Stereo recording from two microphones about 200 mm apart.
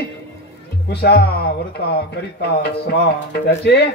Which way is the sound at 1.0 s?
50° left (ahead or behind).